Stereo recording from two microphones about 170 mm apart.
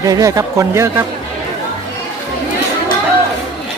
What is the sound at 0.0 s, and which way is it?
Speech, 20° right (ahead or behind).